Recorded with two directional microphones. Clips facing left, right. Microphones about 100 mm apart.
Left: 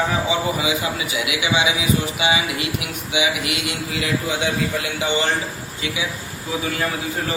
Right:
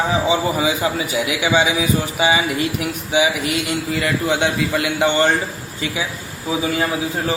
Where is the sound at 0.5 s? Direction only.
40° right (ahead or behind).